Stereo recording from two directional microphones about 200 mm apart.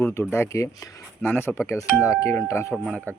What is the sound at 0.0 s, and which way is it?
Speech, 15° left (ahead or behind).